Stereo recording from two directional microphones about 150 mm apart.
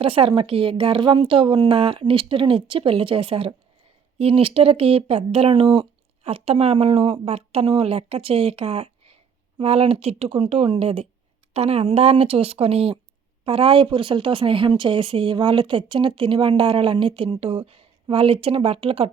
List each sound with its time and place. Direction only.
0.0 s speech: 35° right (ahead or behind)